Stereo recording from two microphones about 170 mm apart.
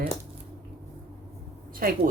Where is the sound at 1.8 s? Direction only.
60° right (ahead or behind).